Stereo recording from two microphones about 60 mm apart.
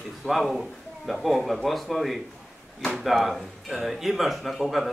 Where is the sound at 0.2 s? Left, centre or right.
Centre.